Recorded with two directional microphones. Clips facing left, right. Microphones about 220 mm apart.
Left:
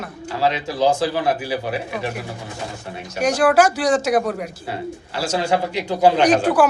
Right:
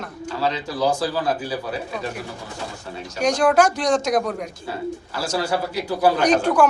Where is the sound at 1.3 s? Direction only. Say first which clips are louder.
Left 3 dB; 75° left (ahead or behind).